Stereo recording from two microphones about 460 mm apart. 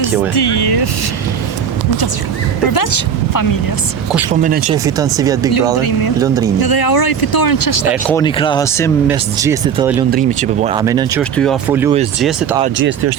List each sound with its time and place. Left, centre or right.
0.3 s speech: left
2.7 s speech: left
4.1 s speech: centre
6.6 s speech: left
8.0 s speech: centre
9.0 s speech: centre
10.1 s speech: centre
12.6 s speech: right